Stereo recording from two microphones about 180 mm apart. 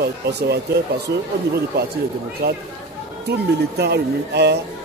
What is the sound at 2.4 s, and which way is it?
Speech, 60° right (ahead or behind).